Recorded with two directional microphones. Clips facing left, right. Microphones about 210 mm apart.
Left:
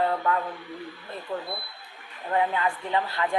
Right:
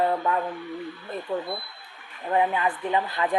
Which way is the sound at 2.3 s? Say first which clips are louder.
Right 2 dB; 20° right (ahead or behind).